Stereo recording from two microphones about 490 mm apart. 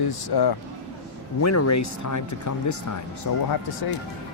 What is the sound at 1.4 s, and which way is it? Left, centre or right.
Speech, left.